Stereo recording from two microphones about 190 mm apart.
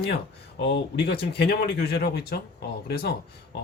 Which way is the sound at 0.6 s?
60° left (ahead or behind).